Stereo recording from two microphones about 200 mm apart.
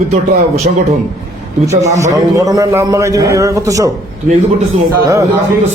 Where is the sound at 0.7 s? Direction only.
40° right (ahead or behind).